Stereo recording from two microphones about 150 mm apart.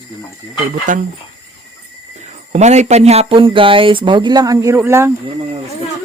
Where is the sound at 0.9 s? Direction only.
55° right (ahead or behind).